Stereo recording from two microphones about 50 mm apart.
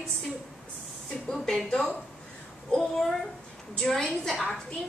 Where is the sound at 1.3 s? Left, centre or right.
Centre.